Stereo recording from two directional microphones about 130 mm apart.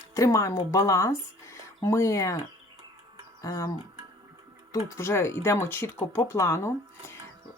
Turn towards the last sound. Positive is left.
turn(degrees=20)  # may be behind; listen again after turning